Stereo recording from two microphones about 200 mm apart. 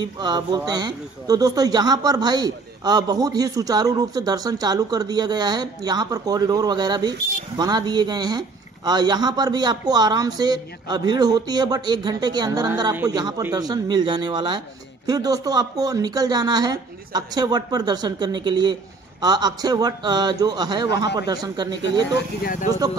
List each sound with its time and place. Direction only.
0.0 s a man's voice: 20° right (ahead or behind)
22.4 s speech: 45° left (ahead or behind)